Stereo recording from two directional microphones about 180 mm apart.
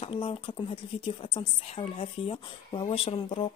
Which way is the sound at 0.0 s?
30° left (ahead or behind).